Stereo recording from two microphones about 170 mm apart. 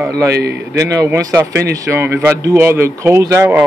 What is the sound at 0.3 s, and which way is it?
Speech, 70° right (ahead or behind).